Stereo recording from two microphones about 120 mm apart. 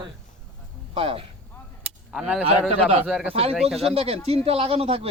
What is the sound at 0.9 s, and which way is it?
Speech, 50° right (ahead or behind).